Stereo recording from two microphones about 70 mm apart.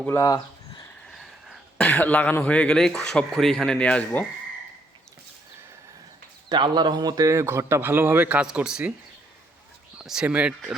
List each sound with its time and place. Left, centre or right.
0.2 s a sound: left
1.1 s a sound: centre
1.8 s speech: left
6.5 s speech: right
7.3 s a man's voice: right
8.4 s speech: centre
10.0 s speech: centre
10.2 s speech: right